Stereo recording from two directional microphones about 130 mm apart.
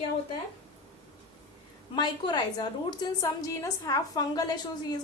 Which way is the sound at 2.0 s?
35° left (ahead or behind).